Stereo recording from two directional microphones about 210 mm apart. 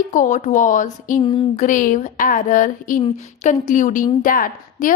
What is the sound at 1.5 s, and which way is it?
A woman's voice, 40° left (ahead or behind).